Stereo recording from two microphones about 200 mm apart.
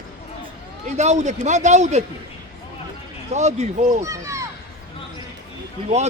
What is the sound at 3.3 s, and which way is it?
Speech, 35° right (ahead or behind).